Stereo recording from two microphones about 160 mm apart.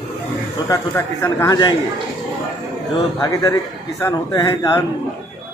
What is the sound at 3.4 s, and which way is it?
A man's voice, 15° left (ahead or behind).